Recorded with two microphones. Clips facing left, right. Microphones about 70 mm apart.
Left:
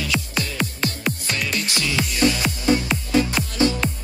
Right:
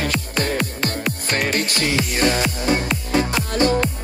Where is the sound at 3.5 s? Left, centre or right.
Right.